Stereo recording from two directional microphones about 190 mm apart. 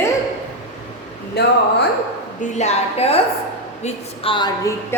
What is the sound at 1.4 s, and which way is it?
Speech, 60° left (ahead or behind).